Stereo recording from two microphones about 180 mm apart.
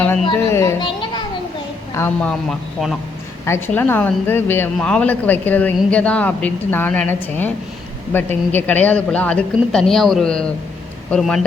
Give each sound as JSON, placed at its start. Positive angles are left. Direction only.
{"t": 0.5, "sound": "speech", "side_deg": 15}
{"t": 0.8, "sound": "a sound", "side_deg": 25}
{"t": 2.0, "sound": "speech", "side_deg": 10}
{"t": 3.4, "sound": "speech", "side_deg": 15}